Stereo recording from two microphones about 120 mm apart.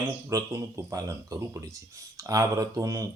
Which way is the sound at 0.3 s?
25° right (ahead or behind).